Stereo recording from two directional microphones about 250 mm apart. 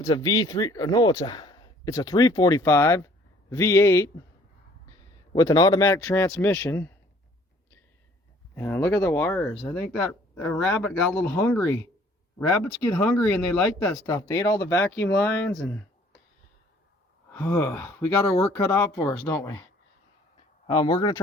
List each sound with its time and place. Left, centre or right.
0.0 s speech: centre
5.3 s speech: centre
8.5 s speech: centre
13.1 s speech: centre
14.1 s speech: centre
17.3 s speech: centre
20.7 s speech: centre